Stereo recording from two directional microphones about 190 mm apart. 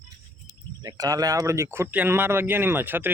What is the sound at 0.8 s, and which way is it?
Speech, 20° right (ahead or behind).